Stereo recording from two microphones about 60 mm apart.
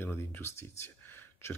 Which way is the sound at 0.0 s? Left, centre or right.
Left.